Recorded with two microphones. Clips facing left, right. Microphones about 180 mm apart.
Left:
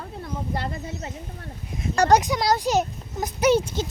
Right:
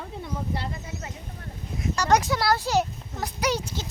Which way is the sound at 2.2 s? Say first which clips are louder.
Left 2 dB; 15° left (ahead or behind).